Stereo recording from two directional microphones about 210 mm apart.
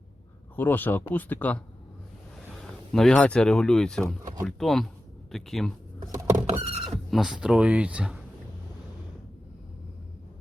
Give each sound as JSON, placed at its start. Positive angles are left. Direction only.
{"t": 0.5, "sound": "speech", "side_deg": 10}
{"t": 6.3, "sound": "rodents", "side_deg": -30}
{"t": 7.1, "sound": "speech", "side_deg": 0}